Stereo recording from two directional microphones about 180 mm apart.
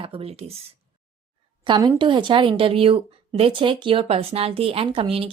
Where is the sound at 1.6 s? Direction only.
20° right (ahead or behind).